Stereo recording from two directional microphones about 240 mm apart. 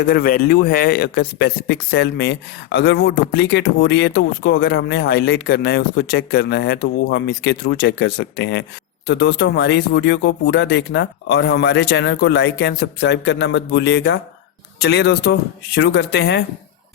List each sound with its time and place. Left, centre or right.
0.1 s a man's voice: left